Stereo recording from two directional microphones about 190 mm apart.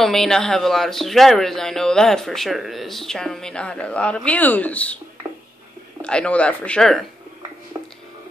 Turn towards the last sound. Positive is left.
turn(degrees=-20)  # may be behind; listen again after turning